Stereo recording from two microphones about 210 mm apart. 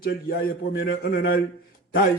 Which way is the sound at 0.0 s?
45° left (ahead or behind).